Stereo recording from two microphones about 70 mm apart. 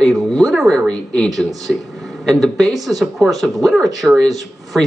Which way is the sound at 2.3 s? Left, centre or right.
Centre.